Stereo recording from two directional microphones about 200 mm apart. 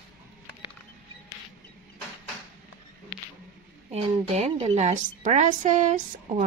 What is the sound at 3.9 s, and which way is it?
A woman's voice, 35° right (ahead or behind).